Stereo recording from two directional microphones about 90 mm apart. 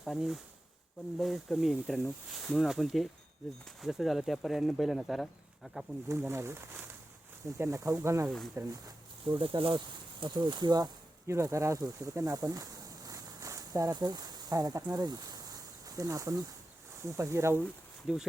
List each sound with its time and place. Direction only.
0.0 s speech: centre (ahead or behind)
6.1 s speech: 30° right (ahead or behind)
9.2 s speech: 65° right (ahead or behind)
11.3 s speech: 30° right (ahead or behind)
13.1 s a sound: 40° right (ahead or behind)
17.0 s speech: 30° right (ahead or behind)
18.1 s speech: 5° right (ahead or behind)